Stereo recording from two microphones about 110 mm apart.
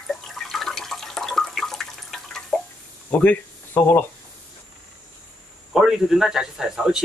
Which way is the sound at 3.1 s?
15° left (ahead or behind).